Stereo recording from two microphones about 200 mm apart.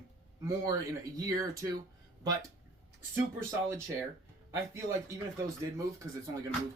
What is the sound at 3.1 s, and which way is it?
Speech, 10° right (ahead or behind).